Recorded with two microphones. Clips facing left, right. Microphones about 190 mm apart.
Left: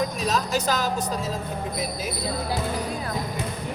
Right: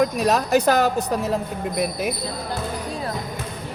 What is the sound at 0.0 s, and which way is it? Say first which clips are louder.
Speech: right 6 dB; 60° right (ahead or behind).